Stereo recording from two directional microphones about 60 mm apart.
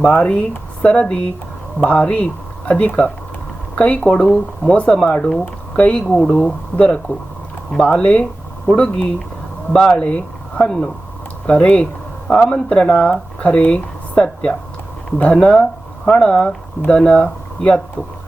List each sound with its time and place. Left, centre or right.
0.1 s speech: centre